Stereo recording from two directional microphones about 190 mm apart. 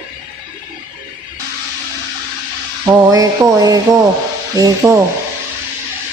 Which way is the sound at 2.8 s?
20° right (ahead or behind).